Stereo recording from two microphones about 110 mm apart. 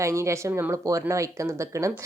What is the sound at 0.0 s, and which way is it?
Speech, 25° right (ahead or behind).